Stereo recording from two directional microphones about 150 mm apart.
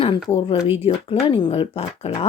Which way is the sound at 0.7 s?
40° left (ahead or behind).